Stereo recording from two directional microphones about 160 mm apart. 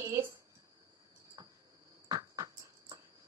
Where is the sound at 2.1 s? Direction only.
25° right (ahead or behind).